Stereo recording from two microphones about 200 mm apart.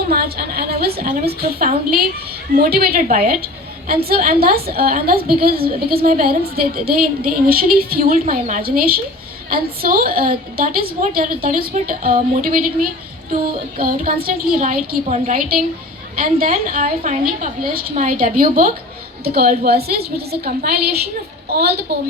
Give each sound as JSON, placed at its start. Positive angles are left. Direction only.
{"t": 0.1, "sound": "a woman's voice", "side_deg": -50}